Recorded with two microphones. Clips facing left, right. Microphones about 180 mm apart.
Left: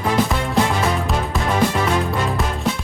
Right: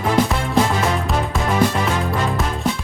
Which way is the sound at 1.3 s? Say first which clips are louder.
Even; centre (ahead or behind).